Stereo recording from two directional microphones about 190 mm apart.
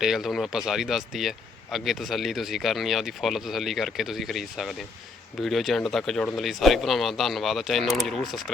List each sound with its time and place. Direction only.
0.0 s a man's voice: centre (ahead or behind)